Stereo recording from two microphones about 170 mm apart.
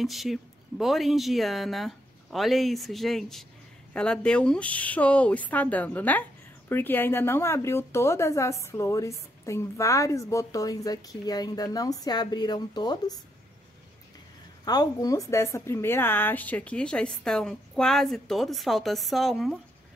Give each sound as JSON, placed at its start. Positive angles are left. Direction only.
{"t": 0.0, "sound": "speech", "side_deg": 0}
{"t": 14.6, "sound": "speech", "side_deg": 25}